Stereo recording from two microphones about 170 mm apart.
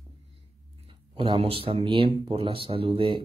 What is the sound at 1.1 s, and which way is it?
Speech, 30° right (ahead or behind).